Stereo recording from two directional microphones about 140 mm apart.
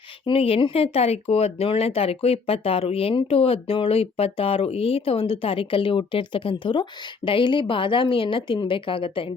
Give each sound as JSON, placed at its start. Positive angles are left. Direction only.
{"t": 0.3, "sound": "speech", "side_deg": 45}